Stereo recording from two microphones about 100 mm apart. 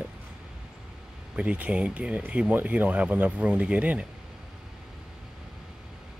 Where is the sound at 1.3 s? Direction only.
10° right (ahead or behind).